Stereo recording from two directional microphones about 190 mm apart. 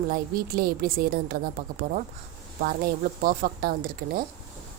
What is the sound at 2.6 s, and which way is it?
A woman's voice, 50° right (ahead or behind).